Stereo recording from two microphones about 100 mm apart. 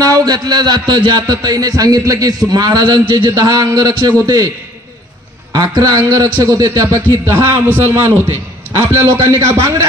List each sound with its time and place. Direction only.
0.0 s a man's voice: 35° right (ahead or behind)
5.5 s a man's voice: 45° right (ahead or behind)